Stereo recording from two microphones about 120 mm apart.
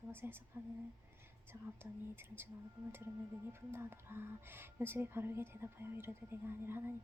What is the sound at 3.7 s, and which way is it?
Speech, 20° right (ahead or behind).